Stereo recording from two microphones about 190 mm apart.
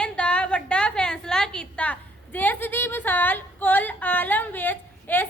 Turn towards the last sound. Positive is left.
turn(degrees=10)  # may be behind; listen again after turning